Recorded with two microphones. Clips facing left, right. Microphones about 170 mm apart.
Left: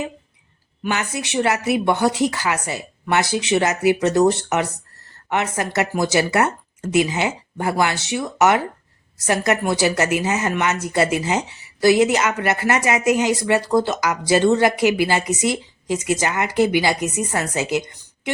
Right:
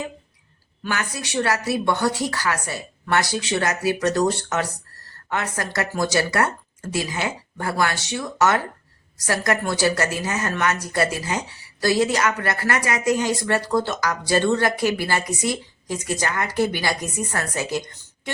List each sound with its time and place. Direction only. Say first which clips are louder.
0.8 s a woman's voice: left 4 dB; 20° left (ahead or behind)